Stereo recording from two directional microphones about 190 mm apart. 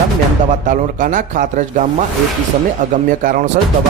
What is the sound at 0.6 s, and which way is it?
A man's voice, 45° right (ahead or behind).